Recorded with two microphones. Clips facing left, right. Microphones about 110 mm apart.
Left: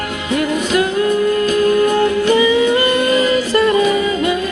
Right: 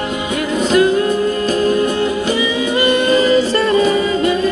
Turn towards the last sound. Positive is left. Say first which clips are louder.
# right 2 dB
turn(degrees=-30)  # may be behind; listen again after turning